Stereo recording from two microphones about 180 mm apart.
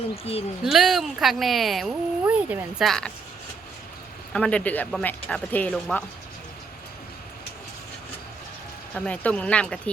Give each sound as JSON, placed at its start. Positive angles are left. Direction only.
{"t": 0.3, "sound": "speech", "side_deg": 35}
{"t": 0.6, "sound": "speech", "side_deg": 0}
{"t": 2.8, "sound": "speech", "side_deg": 5}
{"t": 4.3, "sound": "speech", "side_deg": 5}
{"t": 9.0, "sound": "speech", "side_deg": 5}